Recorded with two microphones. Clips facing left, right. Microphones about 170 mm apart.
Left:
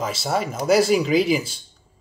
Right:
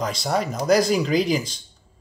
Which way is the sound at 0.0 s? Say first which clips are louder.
Even; 5° left (ahead or behind).